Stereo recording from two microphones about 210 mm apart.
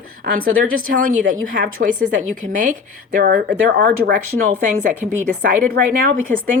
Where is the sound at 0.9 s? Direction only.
40° right (ahead or behind).